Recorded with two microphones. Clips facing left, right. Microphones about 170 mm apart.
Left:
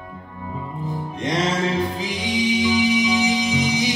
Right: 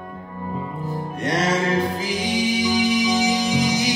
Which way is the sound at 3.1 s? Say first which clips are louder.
Even; 45° right (ahead or behind).